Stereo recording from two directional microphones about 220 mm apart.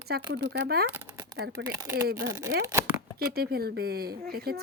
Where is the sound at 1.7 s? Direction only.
15° right (ahead or behind).